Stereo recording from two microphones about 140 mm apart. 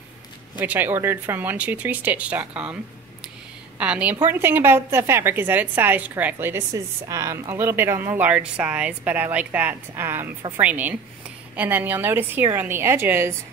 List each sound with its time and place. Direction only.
0.6 s a woman's voice: 15° right (ahead or behind)
3.8 s a woman's voice: 10° right (ahead or behind)